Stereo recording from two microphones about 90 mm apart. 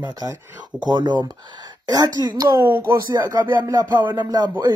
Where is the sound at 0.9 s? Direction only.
55° right (ahead or behind).